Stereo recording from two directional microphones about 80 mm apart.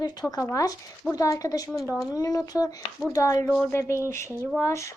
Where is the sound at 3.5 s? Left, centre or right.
Centre.